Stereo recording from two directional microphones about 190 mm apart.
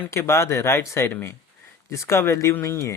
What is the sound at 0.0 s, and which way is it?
Speech, 15° left (ahead or behind).